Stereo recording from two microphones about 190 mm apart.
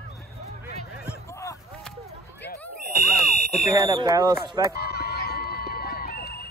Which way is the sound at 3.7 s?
15° right (ahead or behind).